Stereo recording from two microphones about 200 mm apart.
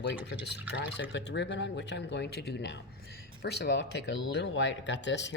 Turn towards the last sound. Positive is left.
turn(degrees=60)  # may be behind; listen again after turning